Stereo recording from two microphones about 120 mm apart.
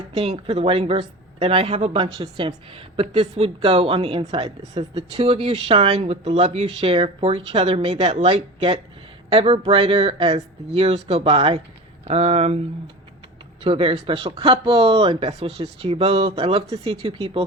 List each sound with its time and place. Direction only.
0.1 s speech: 55° right (ahead or behind)
13.7 s speech: 50° right (ahead or behind)